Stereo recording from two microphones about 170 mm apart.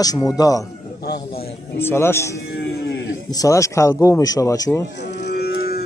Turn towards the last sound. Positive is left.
turn(degrees=70)  # may be behind; listen again after turning